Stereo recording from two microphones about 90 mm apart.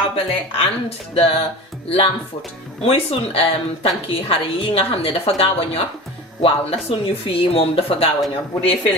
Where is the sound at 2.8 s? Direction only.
90° left.